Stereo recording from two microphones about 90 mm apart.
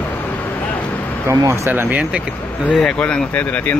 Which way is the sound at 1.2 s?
30° right (ahead or behind).